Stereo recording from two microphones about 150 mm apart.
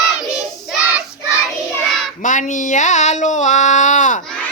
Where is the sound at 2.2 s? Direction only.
55° left (ahead or behind).